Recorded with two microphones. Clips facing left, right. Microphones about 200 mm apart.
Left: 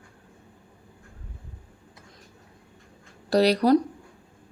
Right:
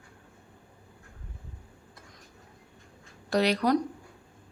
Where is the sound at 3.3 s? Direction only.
35° left (ahead or behind).